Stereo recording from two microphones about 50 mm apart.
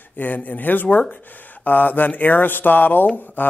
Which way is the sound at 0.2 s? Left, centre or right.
Left.